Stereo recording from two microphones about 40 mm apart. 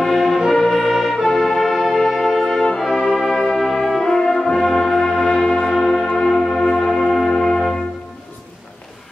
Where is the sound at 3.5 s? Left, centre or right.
Centre.